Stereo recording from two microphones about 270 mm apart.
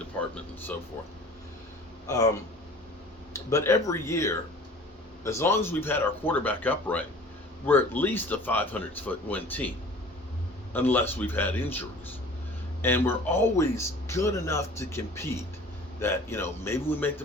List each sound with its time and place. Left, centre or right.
0.2 s speech: centre
2.0 s speech: centre
3.3 s speech: centre